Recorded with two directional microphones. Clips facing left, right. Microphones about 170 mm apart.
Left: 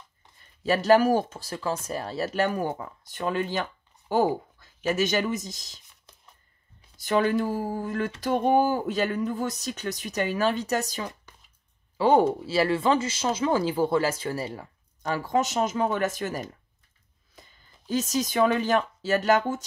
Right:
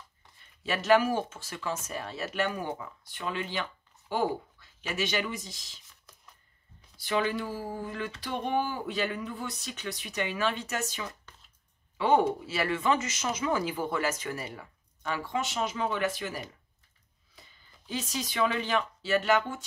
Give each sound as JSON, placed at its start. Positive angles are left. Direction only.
{"t": 0.7, "sound": "speech", "side_deg": 35}
{"t": 7.0, "sound": "speech", "side_deg": 45}